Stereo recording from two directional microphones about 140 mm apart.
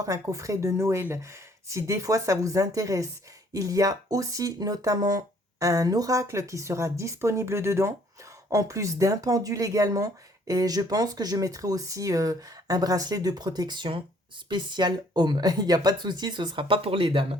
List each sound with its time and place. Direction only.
0.0 s speech: 25° right (ahead or behind); by 17.2 s 40° right (ahead or behind)